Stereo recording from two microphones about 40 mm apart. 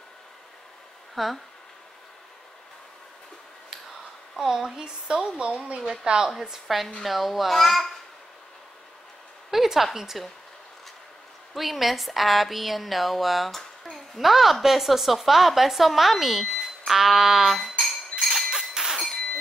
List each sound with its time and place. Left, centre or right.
1.1 s speech: centre
4.4 s speech: centre
5.4 s a woman's voice: right
7.0 s a woman's voice: centre
9.5 s a sound: centre
9.9 s speech: centre
11.5 s a woman's voice: centre
16.5 s smoke detector: centre
17.6 s cutlery: centre
18.2 s a sound: centre
18.5 s music: centre